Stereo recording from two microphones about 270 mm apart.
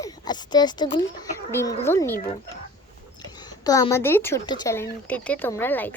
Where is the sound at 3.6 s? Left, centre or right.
Centre.